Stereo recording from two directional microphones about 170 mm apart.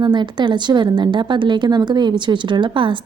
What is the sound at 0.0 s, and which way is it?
A woman's voice, 25° right (ahead or behind).